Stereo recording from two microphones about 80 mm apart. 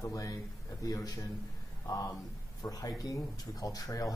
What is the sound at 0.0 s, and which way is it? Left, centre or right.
Speech, left.